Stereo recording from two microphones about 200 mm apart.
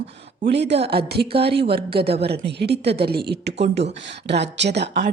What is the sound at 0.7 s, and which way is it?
Speech, 30° right (ahead or behind).